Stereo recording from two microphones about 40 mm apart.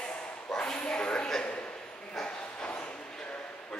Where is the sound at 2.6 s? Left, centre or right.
Left.